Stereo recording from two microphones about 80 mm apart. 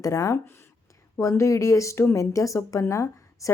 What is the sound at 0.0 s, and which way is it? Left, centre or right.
A woman's voice, left.